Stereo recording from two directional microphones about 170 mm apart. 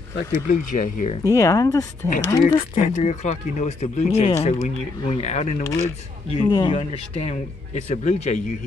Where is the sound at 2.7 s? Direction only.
45° left (ahead or behind).